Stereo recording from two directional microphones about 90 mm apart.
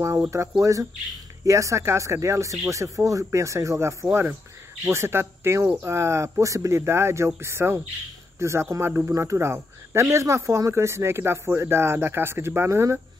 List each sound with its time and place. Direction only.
0.6 s speech: 35° right (ahead or behind)